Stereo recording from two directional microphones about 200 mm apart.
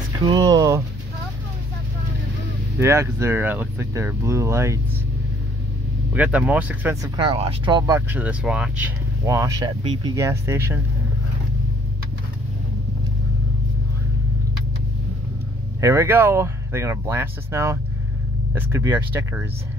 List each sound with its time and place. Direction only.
0.3 s speech: 20° right (ahead or behind)
2.8 s speech: 15° right (ahead or behind)
6.1 s speech: 5° right (ahead or behind)
7.2 s speech: 30° right (ahead or behind)
15.8 s speech: 15° right (ahead or behind)